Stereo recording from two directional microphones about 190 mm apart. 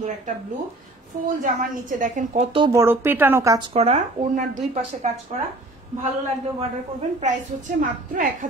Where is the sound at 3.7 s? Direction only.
35° right (ahead or behind).